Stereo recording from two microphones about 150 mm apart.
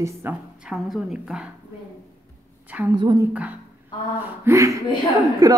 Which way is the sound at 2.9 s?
30° right (ahead or behind).